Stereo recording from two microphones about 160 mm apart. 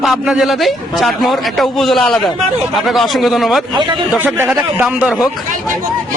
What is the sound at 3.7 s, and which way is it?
Speech, 30° right (ahead or behind).